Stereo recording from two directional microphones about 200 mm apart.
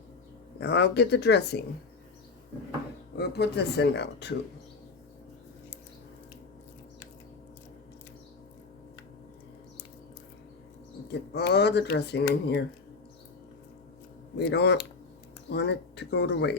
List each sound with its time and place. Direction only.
0.6 s speech: 55° left (ahead or behind)
3.2 s speech: 55° left (ahead or behind)
11.1 s speech: 55° left (ahead or behind)
14.3 s speech: 55° left (ahead or behind)